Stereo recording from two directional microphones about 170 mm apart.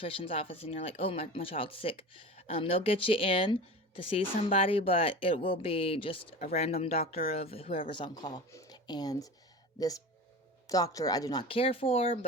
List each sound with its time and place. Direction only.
0.0 s speech: 30° left (ahead or behind)
10.7 s speech: 20° left (ahead or behind)